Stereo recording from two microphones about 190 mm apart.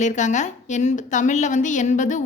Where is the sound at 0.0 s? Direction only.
40° left (ahead or behind).